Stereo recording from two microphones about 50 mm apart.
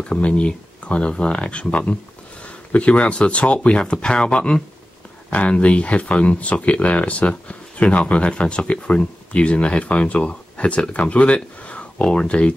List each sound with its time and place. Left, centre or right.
0.0 s speech: left